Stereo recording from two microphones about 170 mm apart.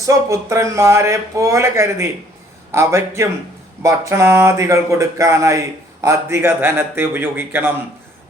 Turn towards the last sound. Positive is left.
turn(degrees=-10)  # may be behind; listen again after turning